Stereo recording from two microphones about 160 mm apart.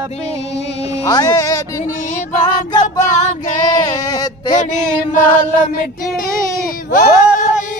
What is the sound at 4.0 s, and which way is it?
Speech, 25° left (ahead or behind).